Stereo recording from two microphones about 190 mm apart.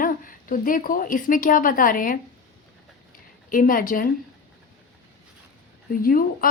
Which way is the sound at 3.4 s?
45° left (ahead or behind).